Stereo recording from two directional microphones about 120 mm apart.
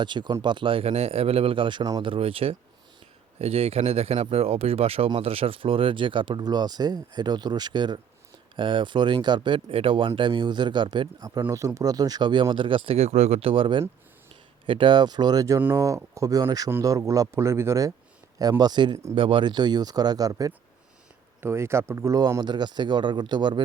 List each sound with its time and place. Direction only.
0.0 s speech: 40° right (ahead or behind)
18.6 s speech: 40° right (ahead or behind)